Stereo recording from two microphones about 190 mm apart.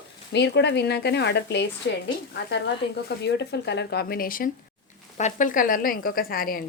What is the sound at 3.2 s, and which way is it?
A woman's voice, 65° left (ahead or behind).